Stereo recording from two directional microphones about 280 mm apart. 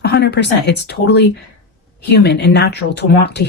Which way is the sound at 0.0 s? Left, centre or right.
Left.